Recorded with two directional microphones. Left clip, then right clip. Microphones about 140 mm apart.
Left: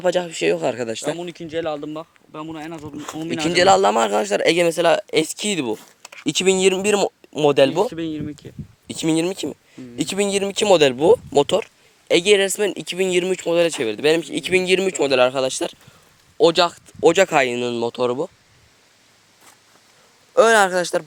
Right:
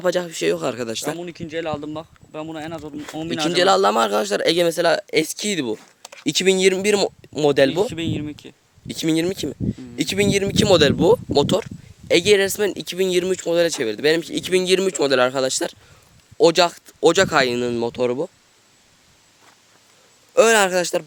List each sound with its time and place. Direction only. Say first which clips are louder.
0.0 s speech: left 1 dB; 15° right (ahead or behind)
1.2 s speech: left 2 dB; 5° left (ahead or behind)
1.8 s speech: even; 30° right (ahead or behind)
3.3 s speech: left 2 dB; 5° right (ahead or behind)
6.2 s speech: even; 25° right (ahead or behind)
7.9 s speech: even; 50° right (ahead or behind)
8.9 s speech: even; 15° right (ahead or behind)
20.3 s speech: left 1 dB; 30° right (ahead or behind)